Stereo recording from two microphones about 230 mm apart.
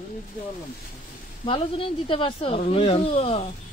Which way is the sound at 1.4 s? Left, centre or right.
Left.